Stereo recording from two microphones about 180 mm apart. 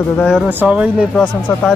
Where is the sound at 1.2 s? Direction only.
10° left (ahead or behind).